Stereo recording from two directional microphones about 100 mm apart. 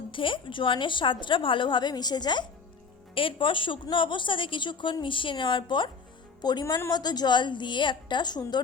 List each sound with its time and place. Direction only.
0.1 s a woman's voice: 60° left (ahead or behind)
3.2 s a woman's voice: 60° left (ahead or behind); by 8.6 s 45° left (ahead or behind)